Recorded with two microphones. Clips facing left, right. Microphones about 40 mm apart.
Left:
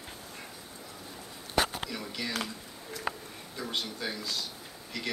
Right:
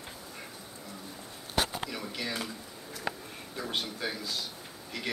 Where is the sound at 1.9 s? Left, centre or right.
Centre.